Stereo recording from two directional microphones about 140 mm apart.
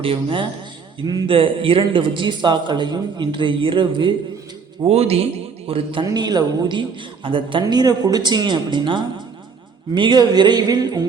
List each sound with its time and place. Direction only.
0.0 s speech: 40° right (ahead or behind)
4.9 s speech: 45° right (ahead or behind)
6.1 s speech: 30° right (ahead or behind)